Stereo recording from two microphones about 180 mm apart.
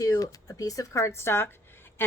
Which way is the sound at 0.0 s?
20° left (ahead or behind).